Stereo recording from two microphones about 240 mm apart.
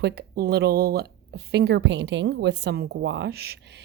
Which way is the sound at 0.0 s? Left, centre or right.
Right.